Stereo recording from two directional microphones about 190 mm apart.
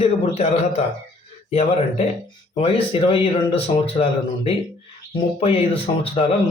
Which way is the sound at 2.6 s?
30° left (ahead or behind).